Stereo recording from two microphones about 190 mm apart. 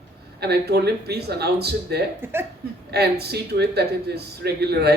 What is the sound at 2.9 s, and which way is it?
Speech, 60° right (ahead or behind).